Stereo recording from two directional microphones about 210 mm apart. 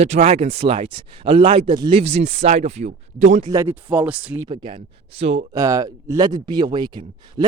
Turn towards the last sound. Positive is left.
turn(degrees=-20)  # may be behind; listen again after turning